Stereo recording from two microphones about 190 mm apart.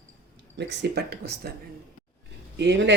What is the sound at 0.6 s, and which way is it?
Speech, 65° right (ahead or behind).